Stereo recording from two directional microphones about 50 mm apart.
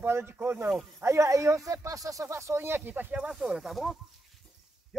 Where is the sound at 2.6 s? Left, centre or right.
Right.